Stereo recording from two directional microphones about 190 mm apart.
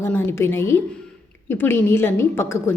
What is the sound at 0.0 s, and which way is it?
A woman's voice, 10° left (ahead or behind).